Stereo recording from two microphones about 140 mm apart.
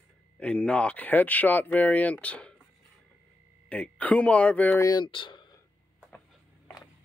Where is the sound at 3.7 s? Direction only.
10° left (ahead or behind).